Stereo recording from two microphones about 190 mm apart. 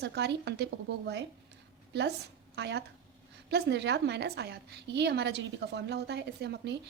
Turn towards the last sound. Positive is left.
turn(degrees=-60)  # may be behind; listen again after turning